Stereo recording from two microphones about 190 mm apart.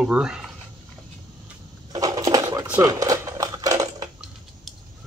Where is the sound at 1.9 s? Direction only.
20° right (ahead or behind).